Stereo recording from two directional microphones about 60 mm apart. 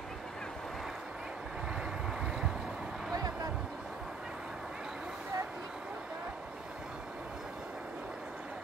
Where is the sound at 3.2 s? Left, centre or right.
Right.